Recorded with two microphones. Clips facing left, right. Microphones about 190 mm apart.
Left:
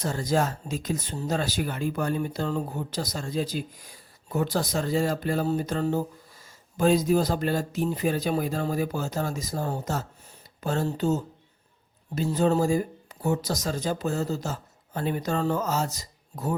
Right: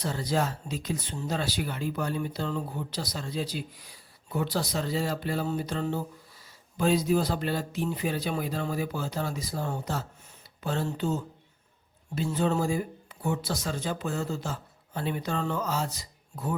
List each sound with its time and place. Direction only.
0.0 s speech: 45° left (ahead or behind)